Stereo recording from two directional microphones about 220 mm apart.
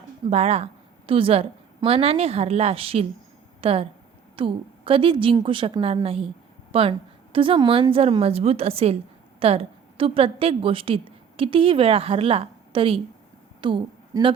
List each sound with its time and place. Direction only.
0.3 s a woman's voice: 30° right (ahead or behind)